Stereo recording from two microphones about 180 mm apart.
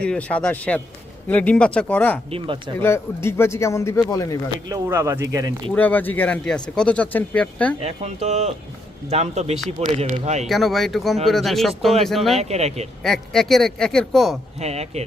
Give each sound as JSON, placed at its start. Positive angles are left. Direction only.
{"t": 0.0, "sound": "speech", "side_deg": 5}
{"t": 4.7, "sound": "speech", "side_deg": -15}
{"t": 5.7, "sound": "speech", "side_deg": 10}
{"t": 7.8, "sound": "speech", "side_deg": -35}
{"t": 10.4, "sound": "a man's voice", "side_deg": 0}
{"t": 12.4, "sound": "speech", "side_deg": -35}
{"t": 13.0, "sound": "a man's voice", "side_deg": 0}
{"t": 14.6, "sound": "speech", "side_deg": -35}